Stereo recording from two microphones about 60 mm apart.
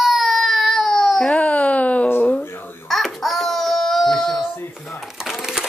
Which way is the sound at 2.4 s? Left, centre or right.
Left.